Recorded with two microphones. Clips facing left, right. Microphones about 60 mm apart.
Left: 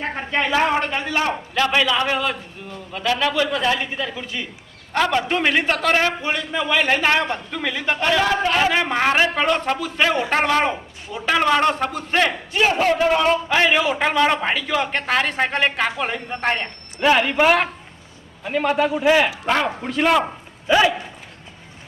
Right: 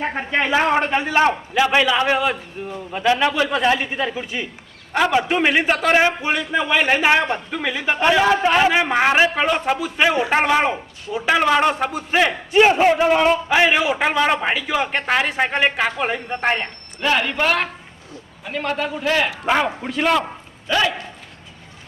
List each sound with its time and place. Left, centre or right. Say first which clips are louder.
0.0 s a man's voice: right 2 dB; centre
5.1 s a man's voice: right 3 dB; centre
12.5 s a man's voice: right 5 dB; right
13.2 s a man's voice: right 2 dB; centre
17.0 s a man's voice: left 3 dB; centre
19.5 s a man's voice: right 1 dB; centre
20.7 s a man's voice: left 3 dB; centre